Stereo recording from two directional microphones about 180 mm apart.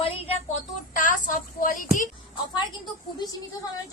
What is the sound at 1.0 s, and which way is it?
Speech, 45° left (ahead or behind).